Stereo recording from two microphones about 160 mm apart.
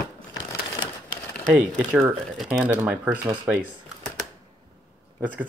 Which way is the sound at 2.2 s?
Centre (ahead or behind).